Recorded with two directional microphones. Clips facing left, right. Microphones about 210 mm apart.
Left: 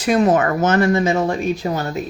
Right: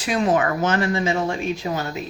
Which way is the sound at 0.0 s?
45° left (ahead or behind).